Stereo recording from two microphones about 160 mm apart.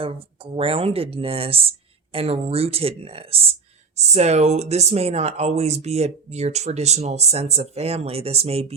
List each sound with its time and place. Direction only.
0.0 s speech: 35° right (ahead or behind)